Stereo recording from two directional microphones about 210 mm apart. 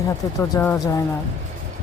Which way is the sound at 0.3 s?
15° left (ahead or behind).